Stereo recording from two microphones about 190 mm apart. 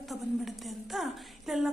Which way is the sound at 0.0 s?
Centre (ahead or behind).